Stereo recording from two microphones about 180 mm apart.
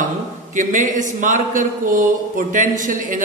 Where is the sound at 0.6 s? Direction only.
45° right (ahead or behind).